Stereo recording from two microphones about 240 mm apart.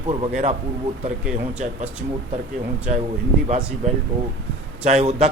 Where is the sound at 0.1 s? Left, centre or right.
Right.